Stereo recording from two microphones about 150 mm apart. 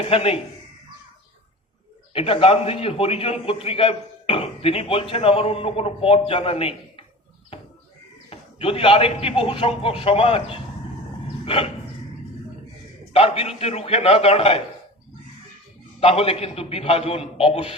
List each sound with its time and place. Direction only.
0.0 s a man's voice: 40° left (ahead or behind)
2.1 s a man's voice: 40° left (ahead or behind)
8.3 s a man's voice: 40° left (ahead or behind)
13.1 s a man's voice: 40° left (ahead or behind)
16.0 s a man's voice: 40° left (ahead or behind)